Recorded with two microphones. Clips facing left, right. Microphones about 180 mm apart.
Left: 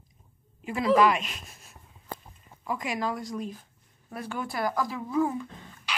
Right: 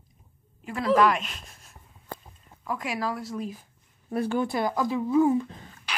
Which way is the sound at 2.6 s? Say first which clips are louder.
Even; centre (ahead or behind).